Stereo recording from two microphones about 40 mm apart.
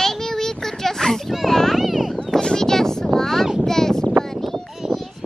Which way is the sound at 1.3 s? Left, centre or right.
Centre.